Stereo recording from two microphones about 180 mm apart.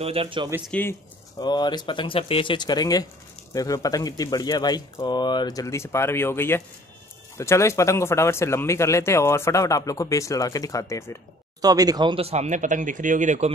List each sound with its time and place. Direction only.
0.0 s speech: 35° right (ahead or behind)
0.7 s speech: 10° left (ahead or behind)
1.4 s speech: 25° left (ahead or behind)
11.6 s speech: 20° right (ahead or behind); by 13.5 s 40° right (ahead or behind)